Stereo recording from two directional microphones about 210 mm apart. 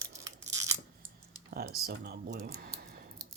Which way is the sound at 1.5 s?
45° right (ahead or behind).